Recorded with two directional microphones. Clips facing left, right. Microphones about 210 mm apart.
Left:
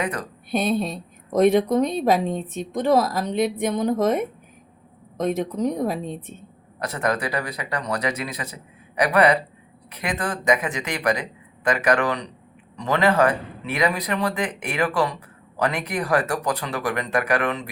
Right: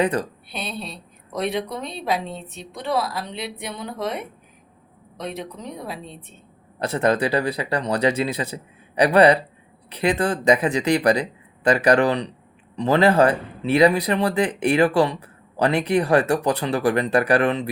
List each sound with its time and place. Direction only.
0.0 s speech: 30° right (ahead or behind)
0.5 s a woman's voice: 45° left (ahead or behind)
6.7 s speech: 30° right (ahead or behind)